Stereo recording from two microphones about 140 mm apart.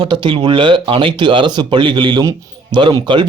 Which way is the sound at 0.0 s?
35° right (ahead or behind).